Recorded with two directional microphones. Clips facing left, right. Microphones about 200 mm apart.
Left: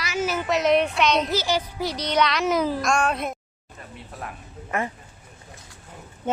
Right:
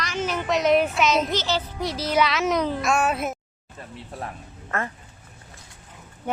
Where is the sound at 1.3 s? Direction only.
10° left (ahead or behind).